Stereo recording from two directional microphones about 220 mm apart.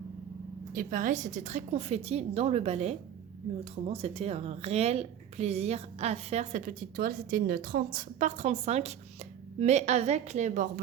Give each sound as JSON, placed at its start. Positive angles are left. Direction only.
{"t": 0.7, "sound": "a woman's voice", "side_deg": -40}